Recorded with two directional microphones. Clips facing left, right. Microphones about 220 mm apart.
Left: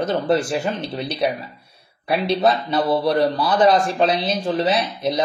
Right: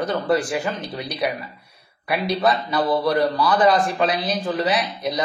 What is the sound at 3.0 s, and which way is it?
Speech, 25° left (ahead or behind).